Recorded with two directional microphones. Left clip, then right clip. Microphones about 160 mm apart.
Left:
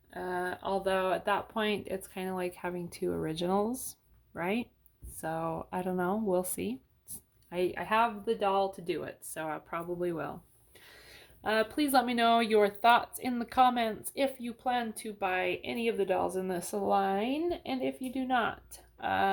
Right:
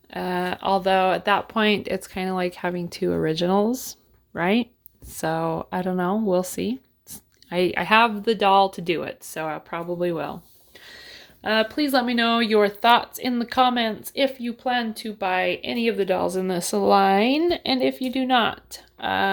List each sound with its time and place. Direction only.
0.1 s speech: 45° right (ahead or behind); by 3.9 s 25° right (ahead or behind)
4.4 s speech: 35° right (ahead or behind)
7.5 s speech: 40° right (ahead or behind)
9.3 s speech: 25° right (ahead or behind)